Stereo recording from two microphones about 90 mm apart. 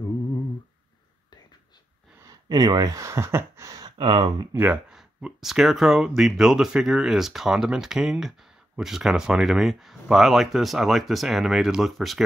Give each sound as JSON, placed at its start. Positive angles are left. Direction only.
{"t": 2.2, "sound": "speech", "side_deg": -45}
{"t": 4.0, "sound": "speech", "side_deg": -60}
{"t": 4.8, "sound": "speech", "side_deg": -5}